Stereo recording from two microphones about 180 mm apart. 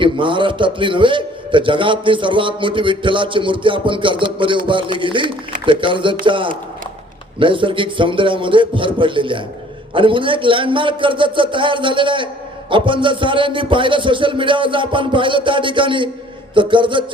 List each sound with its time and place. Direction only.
0.0 s a man's voice: 30° right (ahead or behind)